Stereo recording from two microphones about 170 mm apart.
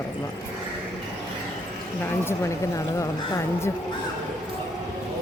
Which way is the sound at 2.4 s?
20° left (ahead or behind).